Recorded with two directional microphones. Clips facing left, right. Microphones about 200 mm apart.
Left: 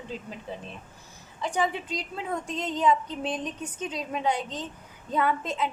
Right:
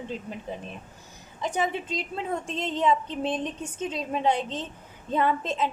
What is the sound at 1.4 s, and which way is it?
A woman's voice, 20° right (ahead or behind).